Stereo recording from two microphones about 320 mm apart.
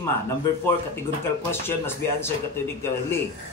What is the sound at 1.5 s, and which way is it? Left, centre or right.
Speech, centre.